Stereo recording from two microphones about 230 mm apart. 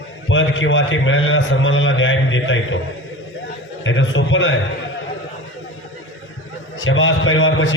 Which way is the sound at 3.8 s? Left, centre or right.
Left.